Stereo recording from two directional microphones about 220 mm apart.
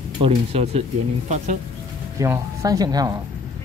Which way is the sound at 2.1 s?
10° right (ahead or behind).